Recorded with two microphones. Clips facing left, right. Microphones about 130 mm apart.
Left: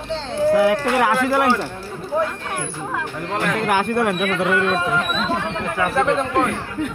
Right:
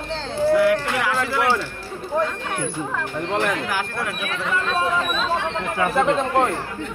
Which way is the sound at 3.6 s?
60° left (ahead or behind).